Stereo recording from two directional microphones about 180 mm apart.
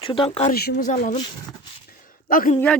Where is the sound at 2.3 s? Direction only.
50° left (ahead or behind).